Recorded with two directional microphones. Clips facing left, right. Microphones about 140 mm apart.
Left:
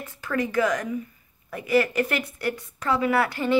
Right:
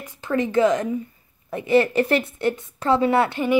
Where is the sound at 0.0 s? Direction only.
20° right (ahead or behind).